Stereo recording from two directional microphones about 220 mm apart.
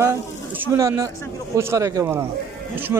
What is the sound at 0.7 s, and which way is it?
Speech, 15° right (ahead or behind).